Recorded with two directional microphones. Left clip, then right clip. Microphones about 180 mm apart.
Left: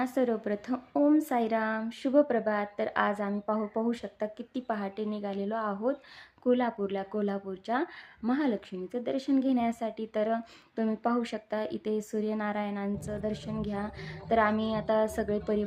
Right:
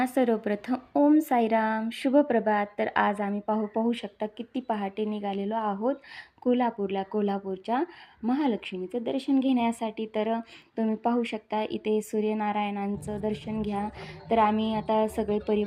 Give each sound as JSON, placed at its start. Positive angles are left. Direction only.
{"t": 0.0, "sound": "a woman's voice", "side_deg": -15}
{"t": 11.6, "sound": "speech", "side_deg": 40}
{"t": 12.3, "sound": "a woman's voice", "side_deg": 0}
{"t": 14.5, "sound": "speech", "side_deg": 40}
{"t": 14.8, "sound": "a woman's voice", "side_deg": 0}